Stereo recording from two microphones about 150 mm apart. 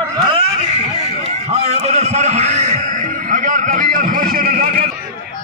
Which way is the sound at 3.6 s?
65° right (ahead or behind).